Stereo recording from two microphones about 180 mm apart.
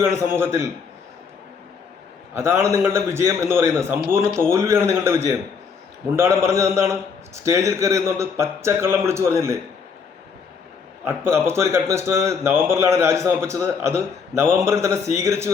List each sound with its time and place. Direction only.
0.0 s a man's voice: 15° right (ahead or behind)
2.3 s a man's voice: 15° right (ahead or behind)
11.0 s a man's voice: 15° right (ahead or behind)